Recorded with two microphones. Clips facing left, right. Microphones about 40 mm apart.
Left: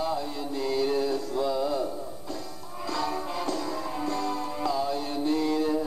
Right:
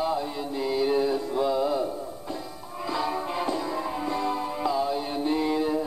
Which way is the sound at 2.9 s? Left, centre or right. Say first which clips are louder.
Right 2 dB; centre.